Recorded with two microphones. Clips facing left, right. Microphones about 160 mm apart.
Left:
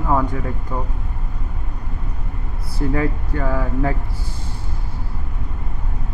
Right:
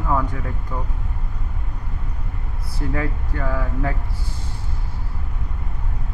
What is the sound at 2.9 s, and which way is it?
Speech, 25° left (ahead or behind).